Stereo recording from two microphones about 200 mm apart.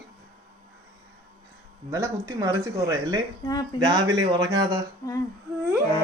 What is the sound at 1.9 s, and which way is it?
Speech, 15° right (ahead or behind).